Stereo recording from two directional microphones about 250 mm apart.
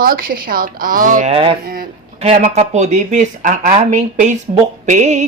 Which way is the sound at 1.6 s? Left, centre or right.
Right.